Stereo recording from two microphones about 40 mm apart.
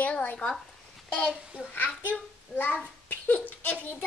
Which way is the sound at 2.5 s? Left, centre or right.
Left.